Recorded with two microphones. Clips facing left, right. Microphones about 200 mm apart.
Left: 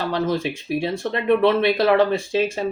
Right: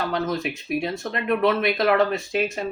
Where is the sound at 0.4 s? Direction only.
30° left (ahead or behind).